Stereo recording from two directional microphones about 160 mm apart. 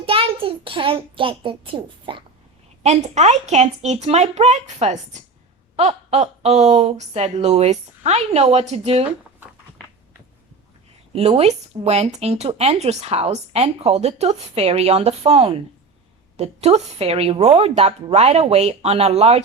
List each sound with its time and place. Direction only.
0.0 s a child's voice: 35° right (ahead or behind)
2.8 s speech: 45° right (ahead or behind)
11.1 s speech: 40° right (ahead or behind)